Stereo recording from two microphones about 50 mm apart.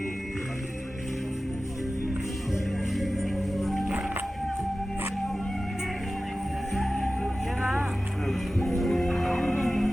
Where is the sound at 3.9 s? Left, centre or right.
Centre.